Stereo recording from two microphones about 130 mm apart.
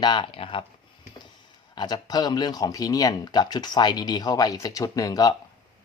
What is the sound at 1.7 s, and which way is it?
Speech, 35° left (ahead or behind).